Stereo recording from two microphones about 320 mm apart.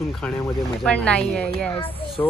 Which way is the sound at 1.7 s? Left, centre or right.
Centre.